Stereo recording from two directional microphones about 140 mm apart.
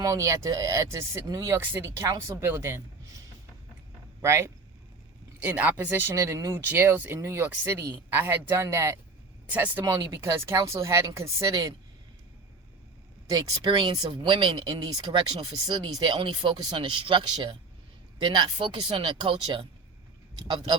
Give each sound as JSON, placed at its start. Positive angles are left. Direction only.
{"t": 0.0, "sound": "speech", "side_deg": -25}
{"t": 4.2, "sound": "speech", "side_deg": -20}
{"t": 9.8, "sound": "speech", "side_deg": -25}
{"t": 13.3, "sound": "speech", "side_deg": -35}